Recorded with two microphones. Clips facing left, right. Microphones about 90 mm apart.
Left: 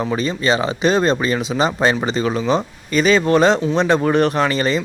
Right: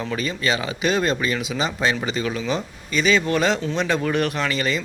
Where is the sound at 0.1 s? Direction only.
30° left (ahead or behind).